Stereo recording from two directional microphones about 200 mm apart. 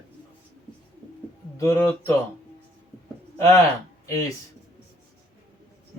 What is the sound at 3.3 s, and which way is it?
Speech, 15° left (ahead or behind).